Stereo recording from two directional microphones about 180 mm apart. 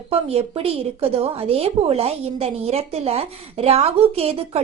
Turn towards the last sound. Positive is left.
turn(degrees=-35)  # may be behind; listen again after turning